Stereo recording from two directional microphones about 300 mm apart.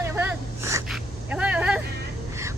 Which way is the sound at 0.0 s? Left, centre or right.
Centre.